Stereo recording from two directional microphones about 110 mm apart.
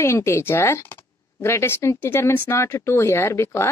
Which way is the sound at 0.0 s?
25° left (ahead or behind).